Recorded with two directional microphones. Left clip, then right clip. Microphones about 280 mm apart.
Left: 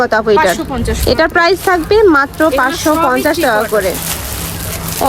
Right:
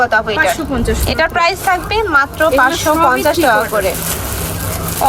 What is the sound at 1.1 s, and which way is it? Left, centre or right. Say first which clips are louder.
Speech: left 4 dB; left.